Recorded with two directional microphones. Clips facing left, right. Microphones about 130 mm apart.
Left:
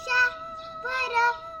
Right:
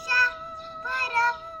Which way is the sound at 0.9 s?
25° left (ahead or behind).